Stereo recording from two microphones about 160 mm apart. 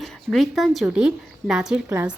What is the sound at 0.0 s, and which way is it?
A woman's voice, centre (ahead or behind).